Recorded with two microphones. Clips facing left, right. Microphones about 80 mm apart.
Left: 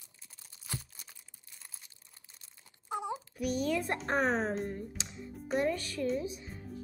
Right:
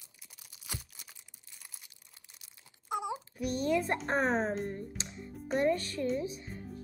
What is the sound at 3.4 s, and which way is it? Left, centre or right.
Speech, right.